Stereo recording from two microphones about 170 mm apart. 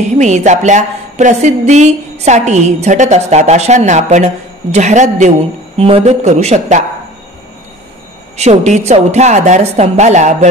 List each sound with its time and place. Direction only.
0.2 s a woman's voice: 45° right (ahead or behind)
8.4 s a woman's voice: 40° right (ahead or behind)